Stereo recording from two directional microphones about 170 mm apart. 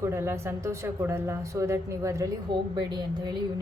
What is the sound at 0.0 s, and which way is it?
A woman's voice, 15° right (ahead or behind).